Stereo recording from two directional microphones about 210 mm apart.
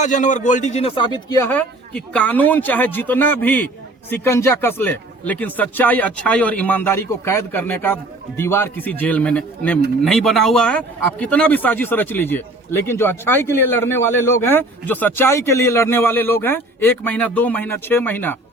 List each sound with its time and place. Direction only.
0.0 s speech: 35° left (ahead or behind)
1.4 s speech: 10° left (ahead or behind)